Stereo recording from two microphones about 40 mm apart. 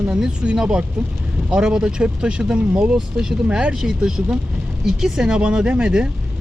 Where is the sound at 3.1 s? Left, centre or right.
Centre.